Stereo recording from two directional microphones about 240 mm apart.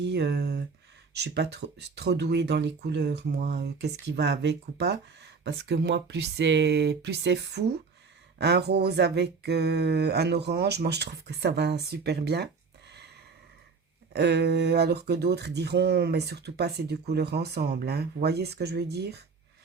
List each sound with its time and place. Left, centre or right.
0.1 s speech: right
14.1 s speech: right